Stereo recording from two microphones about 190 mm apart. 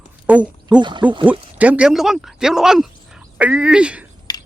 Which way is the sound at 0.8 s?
25° right (ahead or behind).